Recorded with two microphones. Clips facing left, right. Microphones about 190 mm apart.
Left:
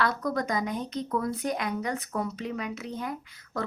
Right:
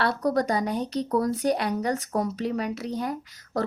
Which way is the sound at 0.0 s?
35° right (ahead or behind).